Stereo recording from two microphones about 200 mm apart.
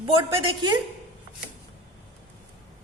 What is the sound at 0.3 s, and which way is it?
Speech, 20° right (ahead or behind).